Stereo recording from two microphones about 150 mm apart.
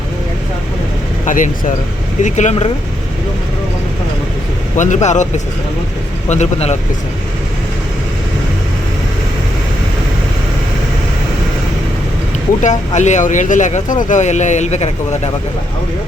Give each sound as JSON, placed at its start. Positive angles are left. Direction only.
{"t": 1.2, "sound": "speech", "side_deg": 60}
{"t": 4.8, "sound": "speech", "side_deg": 55}
{"t": 12.6, "sound": "speech", "side_deg": 50}